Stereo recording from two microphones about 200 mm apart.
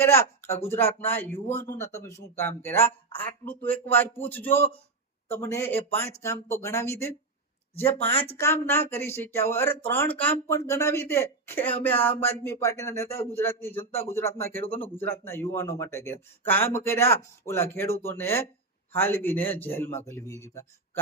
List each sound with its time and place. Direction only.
0.0 s speech: 10° left (ahead or behind)
8.1 s speech: 25° left (ahead or behind)
8.4 s speech: 10° left (ahead or behind)